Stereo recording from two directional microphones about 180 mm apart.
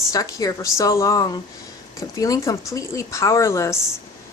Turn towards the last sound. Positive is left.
turn(degrees=15)  # may be behind; listen again after turning